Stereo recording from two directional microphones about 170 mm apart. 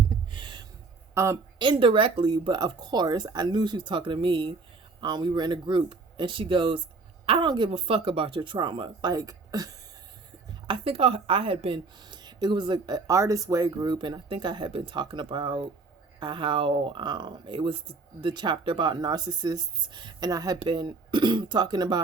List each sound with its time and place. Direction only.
0.1 s a sound: 30° right (ahead or behind)
1.1 s speech: 15° right (ahead or behind)
1.5 s a woman's voice: 30° right (ahead or behind)
10.7 s a woman's voice: 35° right (ahead or behind)